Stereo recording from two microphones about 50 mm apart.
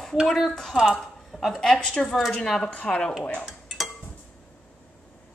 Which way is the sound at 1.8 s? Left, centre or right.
Centre.